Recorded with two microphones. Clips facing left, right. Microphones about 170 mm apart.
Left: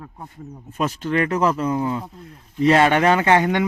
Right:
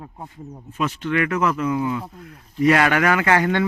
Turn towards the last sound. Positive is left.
turn(degrees=20)  # may be behind; listen again after turning